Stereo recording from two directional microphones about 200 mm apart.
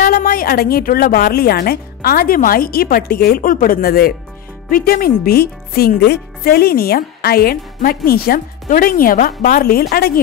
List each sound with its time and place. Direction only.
0.0 s speech: 45° left (ahead or behind)